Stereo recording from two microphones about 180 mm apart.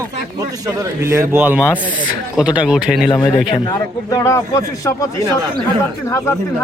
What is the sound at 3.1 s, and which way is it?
Speech, 25° left (ahead or behind).